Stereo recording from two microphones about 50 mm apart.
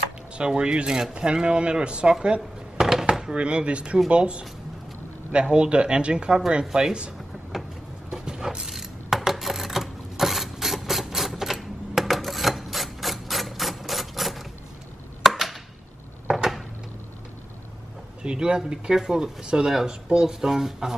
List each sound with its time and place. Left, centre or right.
0.4 s speech: centre
2.8 s a sound: centre
3.1 s speech: centre
7.5 s vehicle: centre
8.4 s a sound: centre
18.2 s speech: centre